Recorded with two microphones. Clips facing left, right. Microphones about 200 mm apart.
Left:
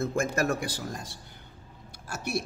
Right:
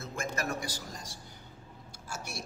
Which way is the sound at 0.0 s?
50° left (ahead or behind).